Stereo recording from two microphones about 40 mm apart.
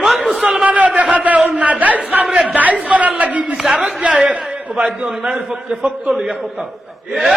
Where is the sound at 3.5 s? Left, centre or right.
Centre; by 5.1 s right.